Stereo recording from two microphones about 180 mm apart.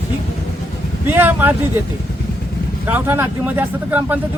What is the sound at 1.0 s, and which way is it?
Speech, 10° right (ahead or behind).